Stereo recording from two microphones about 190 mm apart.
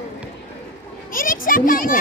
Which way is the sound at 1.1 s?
45° left (ahead or behind).